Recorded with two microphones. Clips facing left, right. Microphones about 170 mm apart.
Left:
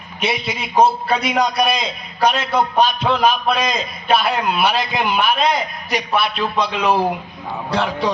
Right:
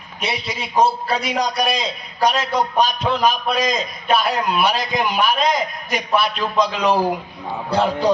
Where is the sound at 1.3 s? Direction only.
35° right (ahead or behind).